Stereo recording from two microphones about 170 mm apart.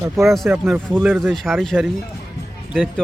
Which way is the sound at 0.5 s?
10° right (ahead or behind).